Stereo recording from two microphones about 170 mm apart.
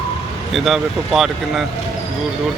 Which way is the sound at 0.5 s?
Centre (ahead or behind).